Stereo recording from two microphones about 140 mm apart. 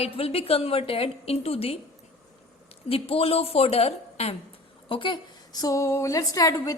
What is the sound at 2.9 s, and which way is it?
A woman's voice, 45° left (ahead or behind).